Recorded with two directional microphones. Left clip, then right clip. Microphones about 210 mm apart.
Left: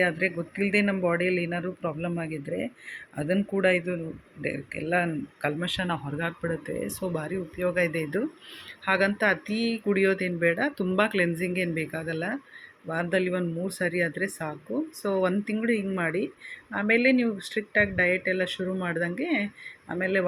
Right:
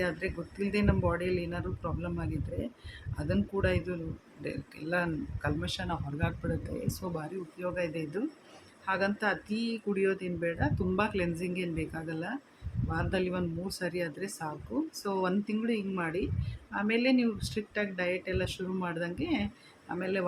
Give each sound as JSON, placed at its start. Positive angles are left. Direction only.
{"t": 0.0, "sound": "speech", "side_deg": 10}